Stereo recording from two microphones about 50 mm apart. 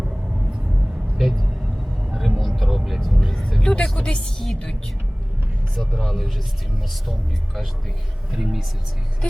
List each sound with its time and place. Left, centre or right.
1.2 s vehicle: centre
2.0 s music: centre
3.6 s music: centre
6.0 s speech: centre